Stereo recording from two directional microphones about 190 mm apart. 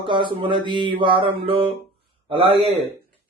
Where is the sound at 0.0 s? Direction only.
25° right (ahead or behind).